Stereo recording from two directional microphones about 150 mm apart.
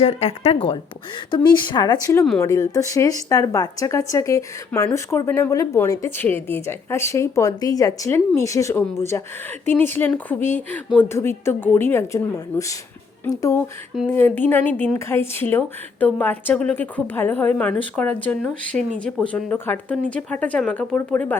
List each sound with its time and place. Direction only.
0.0 s speech: 40° left (ahead or behind); by 21.3 s 10° left (ahead or behind)